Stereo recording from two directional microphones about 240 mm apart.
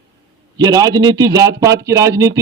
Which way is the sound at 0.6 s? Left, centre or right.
Centre.